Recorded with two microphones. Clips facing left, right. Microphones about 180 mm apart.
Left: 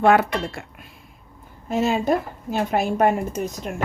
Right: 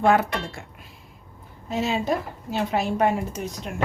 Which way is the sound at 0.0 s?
70° left (ahead or behind).